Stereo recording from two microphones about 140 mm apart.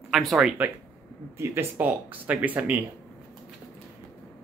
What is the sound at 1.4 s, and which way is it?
Speech, 15° right (ahead or behind).